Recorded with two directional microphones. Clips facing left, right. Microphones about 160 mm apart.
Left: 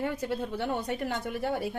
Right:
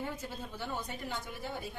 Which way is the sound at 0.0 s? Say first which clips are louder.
Left 9 dB; 75° left (ahead or behind).